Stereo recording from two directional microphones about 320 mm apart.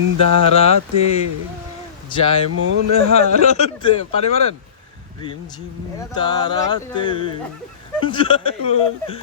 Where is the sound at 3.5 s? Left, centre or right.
Centre.